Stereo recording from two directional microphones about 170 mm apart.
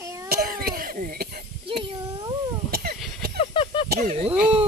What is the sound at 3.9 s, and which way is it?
Speech, 55° right (ahead or behind).